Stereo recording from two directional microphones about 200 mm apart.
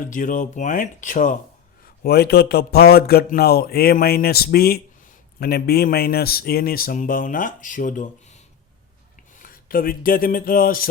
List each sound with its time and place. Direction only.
0.0 s speech: 40° left (ahead or behind)
2.0 s speech: 50° left (ahead or behind)
9.3 s a sound: 45° left (ahead or behind)